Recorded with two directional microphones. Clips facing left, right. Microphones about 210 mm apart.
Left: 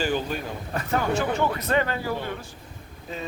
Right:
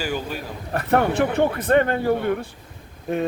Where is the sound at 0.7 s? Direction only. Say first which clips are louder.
Right 5 dB; 60° right (ahead or behind).